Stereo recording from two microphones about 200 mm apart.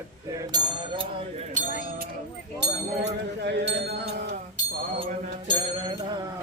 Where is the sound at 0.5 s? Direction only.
25° right (ahead or behind).